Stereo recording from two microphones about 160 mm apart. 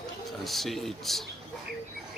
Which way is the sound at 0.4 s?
Centre (ahead or behind).